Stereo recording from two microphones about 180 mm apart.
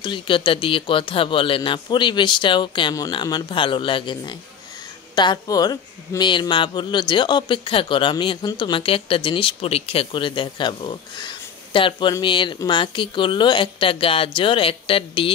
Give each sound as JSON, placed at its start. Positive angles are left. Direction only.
{"t": 0.0, "sound": "speech", "side_deg": 25}